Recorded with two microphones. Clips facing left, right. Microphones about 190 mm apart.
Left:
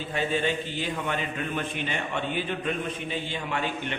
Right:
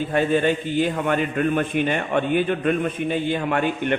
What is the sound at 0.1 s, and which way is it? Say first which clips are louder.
A man's voice: right 7 dB; 55° right (ahead or behind).